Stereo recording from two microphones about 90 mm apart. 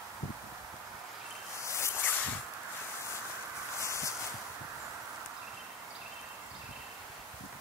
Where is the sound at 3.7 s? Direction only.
35° left (ahead or behind).